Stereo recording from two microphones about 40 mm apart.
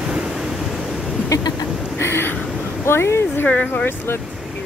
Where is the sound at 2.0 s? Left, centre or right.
Left.